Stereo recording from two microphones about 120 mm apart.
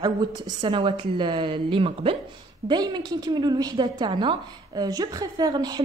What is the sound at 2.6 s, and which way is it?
Speech, 35° right (ahead or behind).